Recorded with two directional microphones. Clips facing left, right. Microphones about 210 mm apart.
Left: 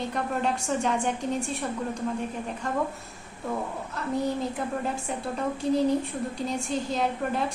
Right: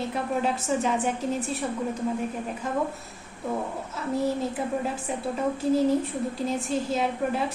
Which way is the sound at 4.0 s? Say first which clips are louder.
Right 1 dB; 5° right (ahead or behind).